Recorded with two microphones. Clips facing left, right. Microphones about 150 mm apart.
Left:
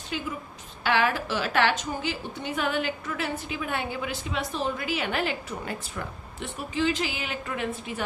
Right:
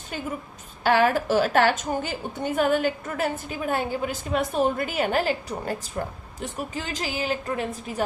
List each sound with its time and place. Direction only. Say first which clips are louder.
0.1 s a woman's voice: right 1 dB; 45° right (ahead or behind)